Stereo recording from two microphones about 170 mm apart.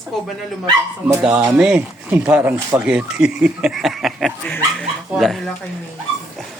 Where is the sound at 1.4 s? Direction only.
10° right (ahead or behind).